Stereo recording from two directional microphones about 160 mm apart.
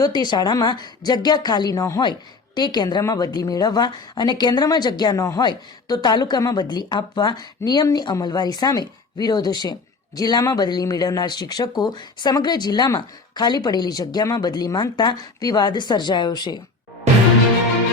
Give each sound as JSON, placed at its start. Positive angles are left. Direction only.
{"t": 0.0, "sound": "a woman's voice", "side_deg": 25}